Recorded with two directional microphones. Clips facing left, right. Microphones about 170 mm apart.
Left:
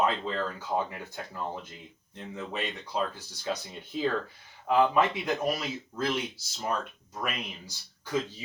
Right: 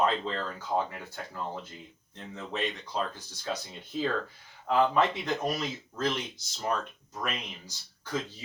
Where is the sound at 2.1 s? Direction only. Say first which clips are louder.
Left 1 dB; 10° left (ahead or behind).